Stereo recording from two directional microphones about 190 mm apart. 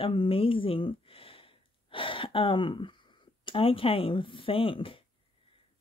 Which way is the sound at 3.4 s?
30° left (ahead or behind).